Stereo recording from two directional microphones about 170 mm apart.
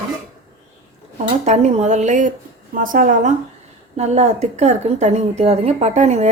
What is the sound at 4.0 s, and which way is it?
A woman's voice, 40° right (ahead or behind).